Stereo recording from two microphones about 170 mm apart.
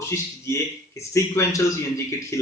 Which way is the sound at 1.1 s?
20° left (ahead or behind).